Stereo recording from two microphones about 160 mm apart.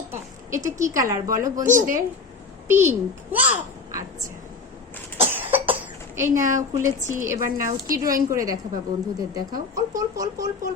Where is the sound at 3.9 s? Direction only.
20° right (ahead or behind).